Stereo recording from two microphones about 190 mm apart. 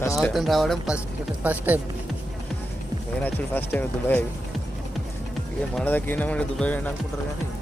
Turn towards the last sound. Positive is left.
turn(degrees=10)  # may be behind; listen again after turning